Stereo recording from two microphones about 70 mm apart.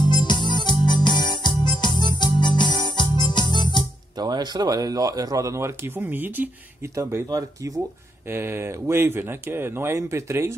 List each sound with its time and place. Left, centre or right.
0.1 s music: left
4.2 s speech: right
5.9 s speech: right
7.0 s speech: right
7.2 s speech: right
8.3 s speech: right